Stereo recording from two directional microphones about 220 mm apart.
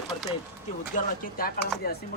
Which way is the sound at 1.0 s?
40° left (ahead or behind).